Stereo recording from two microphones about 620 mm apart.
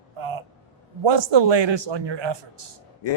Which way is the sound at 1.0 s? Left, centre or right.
Right.